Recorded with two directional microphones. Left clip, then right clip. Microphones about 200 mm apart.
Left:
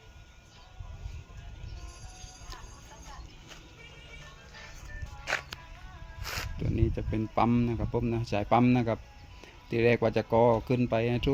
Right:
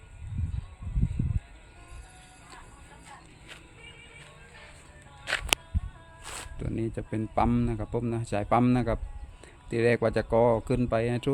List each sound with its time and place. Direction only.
6.2 s speech: 5° left (ahead or behind)